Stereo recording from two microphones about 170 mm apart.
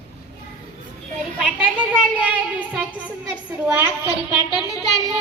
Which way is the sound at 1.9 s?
10° right (ahead or behind).